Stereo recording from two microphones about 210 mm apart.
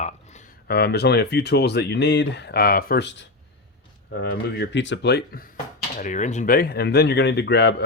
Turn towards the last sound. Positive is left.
turn(degrees=55)  # may be behind; listen again after turning